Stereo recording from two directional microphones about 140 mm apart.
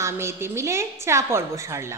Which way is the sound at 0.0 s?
20° right (ahead or behind).